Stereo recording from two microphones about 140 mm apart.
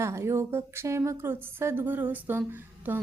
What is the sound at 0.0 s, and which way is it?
Speech, 20° right (ahead or behind).